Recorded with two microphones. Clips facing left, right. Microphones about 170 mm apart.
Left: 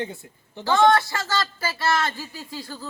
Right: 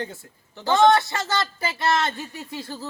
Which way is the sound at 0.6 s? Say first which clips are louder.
Right 1 dB; 20° right (ahead or behind).